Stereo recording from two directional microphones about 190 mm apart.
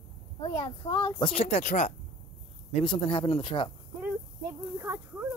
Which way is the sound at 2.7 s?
25° left (ahead or behind).